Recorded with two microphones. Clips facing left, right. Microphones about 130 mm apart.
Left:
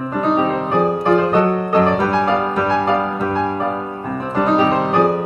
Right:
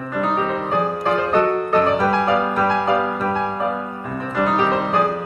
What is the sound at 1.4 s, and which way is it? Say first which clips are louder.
Music: left 2 dB; 30° left (ahead or behind).